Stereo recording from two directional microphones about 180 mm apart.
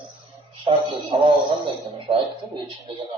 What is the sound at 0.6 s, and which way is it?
A man's voice, 30° right (ahead or behind).